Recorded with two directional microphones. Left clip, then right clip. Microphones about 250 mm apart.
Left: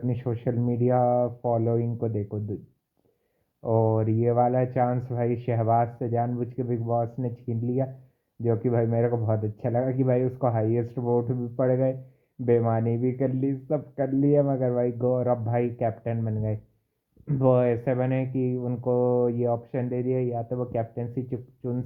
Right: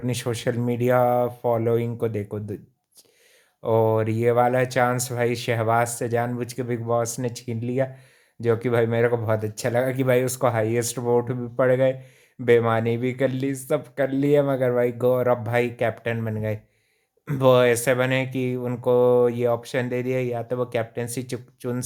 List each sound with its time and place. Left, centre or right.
0.2 s speech: centre
3.6 s speech: right